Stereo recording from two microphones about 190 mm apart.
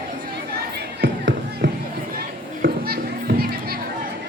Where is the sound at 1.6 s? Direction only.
70° right (ahead or behind).